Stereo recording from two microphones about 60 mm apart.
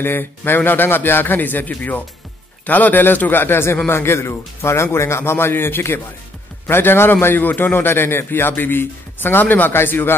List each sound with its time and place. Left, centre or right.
0.0 s a man's voice: left